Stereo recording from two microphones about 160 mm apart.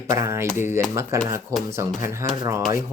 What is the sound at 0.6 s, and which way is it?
Speech, 15° right (ahead or behind).